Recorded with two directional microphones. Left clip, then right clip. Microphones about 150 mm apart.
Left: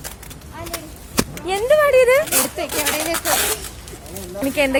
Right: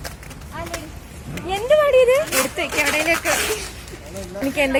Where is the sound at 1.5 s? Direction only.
30° left (ahead or behind).